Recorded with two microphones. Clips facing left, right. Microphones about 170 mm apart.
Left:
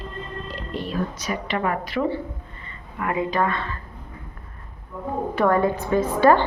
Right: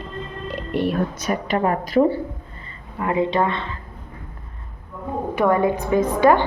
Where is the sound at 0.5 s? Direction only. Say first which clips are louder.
Right 7 dB; 65° right (ahead or behind); by 2.1 s 40° right (ahead or behind).